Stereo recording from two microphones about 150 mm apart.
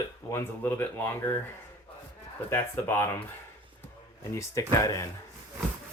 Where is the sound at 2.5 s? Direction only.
15° left (ahead or behind).